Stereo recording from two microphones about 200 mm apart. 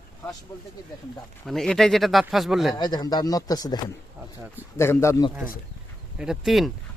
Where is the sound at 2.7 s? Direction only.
20° left (ahead or behind).